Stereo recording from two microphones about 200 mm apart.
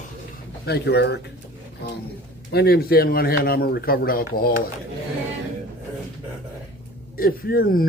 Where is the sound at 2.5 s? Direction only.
55° left (ahead or behind).